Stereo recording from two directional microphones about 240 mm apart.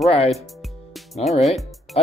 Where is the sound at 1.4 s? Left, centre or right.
Centre.